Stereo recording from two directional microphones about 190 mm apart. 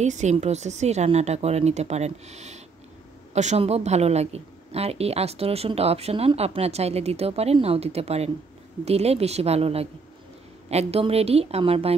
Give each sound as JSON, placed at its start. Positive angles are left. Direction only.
{"t": 0.0, "sound": "a woman's voice", "side_deg": -40}